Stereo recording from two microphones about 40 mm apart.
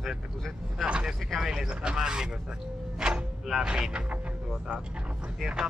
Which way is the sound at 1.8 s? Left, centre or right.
Centre.